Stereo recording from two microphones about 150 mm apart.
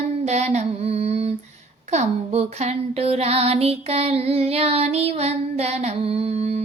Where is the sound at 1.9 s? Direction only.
45° right (ahead or behind).